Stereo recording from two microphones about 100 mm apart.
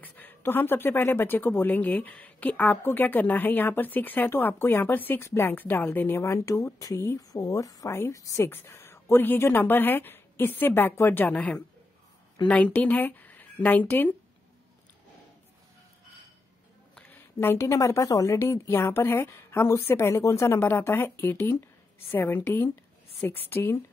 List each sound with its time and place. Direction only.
0.0 s a woman's voice: 20° left (ahead or behind)
17.0 s a woman's voice: 20° left (ahead or behind)